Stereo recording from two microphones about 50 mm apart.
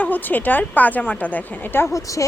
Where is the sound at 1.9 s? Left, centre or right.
Left.